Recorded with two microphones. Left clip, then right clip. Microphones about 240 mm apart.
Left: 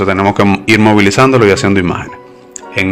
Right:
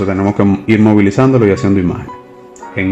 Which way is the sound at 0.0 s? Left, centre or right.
Left.